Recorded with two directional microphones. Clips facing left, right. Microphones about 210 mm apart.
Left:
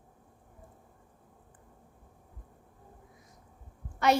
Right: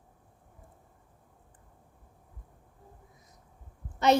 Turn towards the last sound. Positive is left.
turn(degrees=-20)  # may be behind; listen again after turning